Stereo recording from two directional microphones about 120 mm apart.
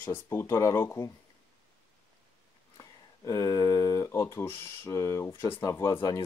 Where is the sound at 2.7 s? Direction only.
30° left (ahead or behind).